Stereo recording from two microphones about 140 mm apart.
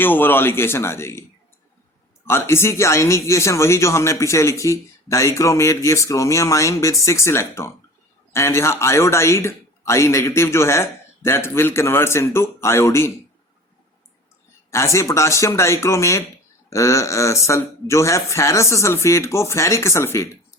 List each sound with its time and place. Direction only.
0.0 s a man's voice: 15° left (ahead or behind)
2.2 s speech: 20° left (ahead or behind)
14.7 s speech: 20° left (ahead or behind)